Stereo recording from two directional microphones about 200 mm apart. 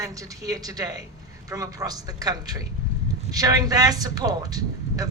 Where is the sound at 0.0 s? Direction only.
15° right (ahead or behind).